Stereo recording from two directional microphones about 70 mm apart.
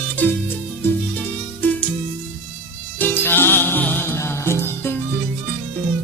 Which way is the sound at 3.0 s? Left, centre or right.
Left.